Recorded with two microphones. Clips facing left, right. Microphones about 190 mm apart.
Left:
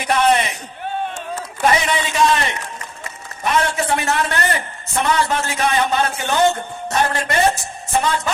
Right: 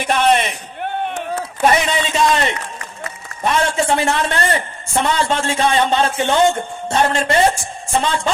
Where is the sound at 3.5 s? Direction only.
25° right (ahead or behind).